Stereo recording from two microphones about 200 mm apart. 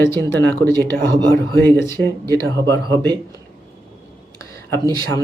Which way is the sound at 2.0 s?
10° left (ahead or behind).